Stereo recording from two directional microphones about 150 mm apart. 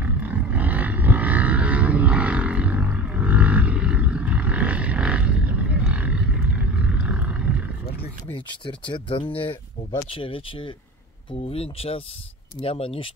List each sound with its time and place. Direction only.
0.0 s vehicle: 10° right (ahead or behind)
5.9 s wild animals: 5° right (ahead or behind)
8.3 s speech: 35° left (ahead or behind)